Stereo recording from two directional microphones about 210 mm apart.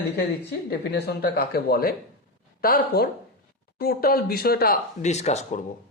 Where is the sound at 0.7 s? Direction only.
50° left (ahead or behind); by 5.6 s 35° left (ahead or behind).